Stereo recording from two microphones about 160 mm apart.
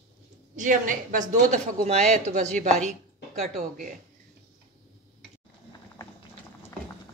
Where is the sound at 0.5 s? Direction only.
55° right (ahead or behind).